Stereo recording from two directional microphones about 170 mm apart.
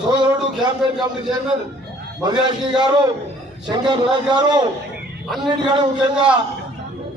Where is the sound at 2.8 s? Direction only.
25° right (ahead or behind).